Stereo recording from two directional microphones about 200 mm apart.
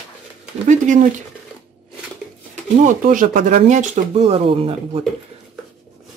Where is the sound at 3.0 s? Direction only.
40° right (ahead or behind).